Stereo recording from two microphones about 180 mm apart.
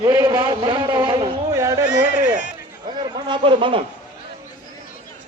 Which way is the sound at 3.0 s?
25° right (ahead or behind).